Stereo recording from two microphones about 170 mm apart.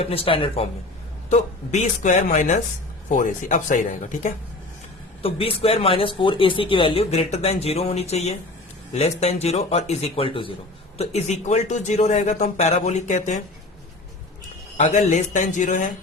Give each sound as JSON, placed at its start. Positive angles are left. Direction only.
{"t": 0.0, "sound": "speech", "side_deg": 35}
{"t": 5.2, "sound": "speech", "side_deg": 35}
{"t": 14.8, "sound": "speech", "side_deg": 40}